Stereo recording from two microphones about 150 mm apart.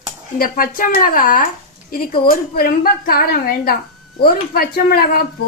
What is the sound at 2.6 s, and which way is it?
A woman's voice, 80° left.